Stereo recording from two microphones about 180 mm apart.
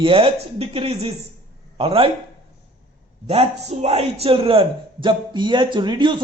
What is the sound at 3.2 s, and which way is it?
A man's voice, 35° right (ahead or behind).